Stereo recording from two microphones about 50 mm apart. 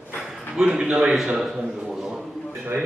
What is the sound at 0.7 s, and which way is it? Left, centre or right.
Speech, right.